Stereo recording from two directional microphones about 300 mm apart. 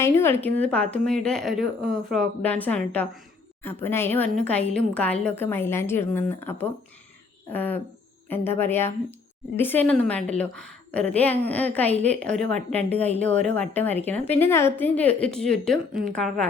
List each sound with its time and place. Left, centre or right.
0.0 s a woman's voice: centre